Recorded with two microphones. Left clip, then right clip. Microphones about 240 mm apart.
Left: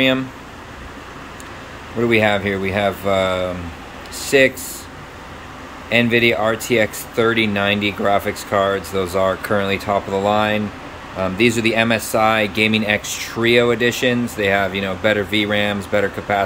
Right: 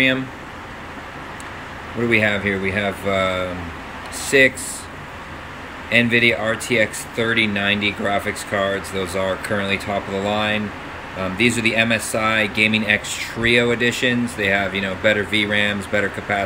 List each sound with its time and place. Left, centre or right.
2.0 s speech: centre
5.9 s speech: centre